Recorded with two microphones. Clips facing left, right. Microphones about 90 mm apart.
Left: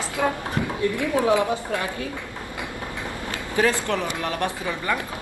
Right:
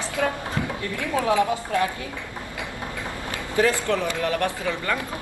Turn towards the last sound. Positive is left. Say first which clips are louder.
# even
turn(degrees=15)  # may be behind; listen again after turning